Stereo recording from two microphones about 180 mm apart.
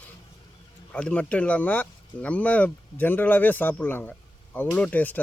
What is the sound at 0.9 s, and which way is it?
Speech, 5° left (ahead or behind).